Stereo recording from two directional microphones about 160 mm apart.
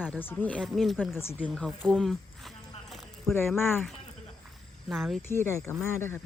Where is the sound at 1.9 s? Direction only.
Centre (ahead or behind).